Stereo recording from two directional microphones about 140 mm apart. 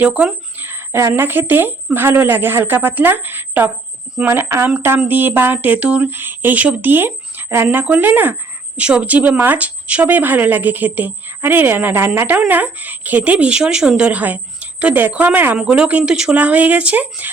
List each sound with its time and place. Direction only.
0.0 s speech: 10° right (ahead or behind)